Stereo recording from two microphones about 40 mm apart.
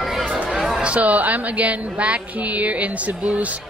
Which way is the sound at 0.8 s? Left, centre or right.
Right.